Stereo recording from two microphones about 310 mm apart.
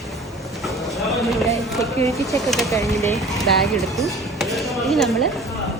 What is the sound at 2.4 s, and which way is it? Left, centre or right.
Speech, centre.